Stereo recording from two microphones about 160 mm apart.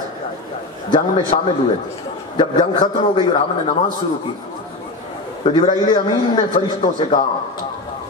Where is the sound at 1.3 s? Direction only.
35° left (ahead or behind).